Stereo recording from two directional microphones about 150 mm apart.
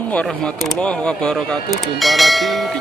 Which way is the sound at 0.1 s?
5° left (ahead or behind).